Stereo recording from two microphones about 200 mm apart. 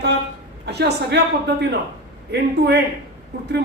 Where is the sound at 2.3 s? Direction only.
55° right (ahead or behind).